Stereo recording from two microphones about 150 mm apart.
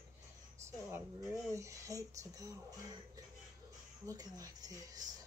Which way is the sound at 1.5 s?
20° right (ahead or behind).